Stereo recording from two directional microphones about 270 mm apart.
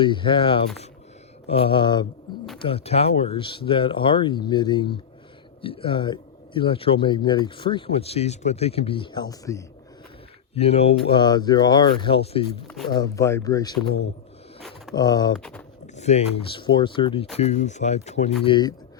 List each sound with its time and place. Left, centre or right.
0.0 s speech: centre
10.5 s speech: left
12.6 s speech: centre
12.9 s speech: centre
14.9 s speech: centre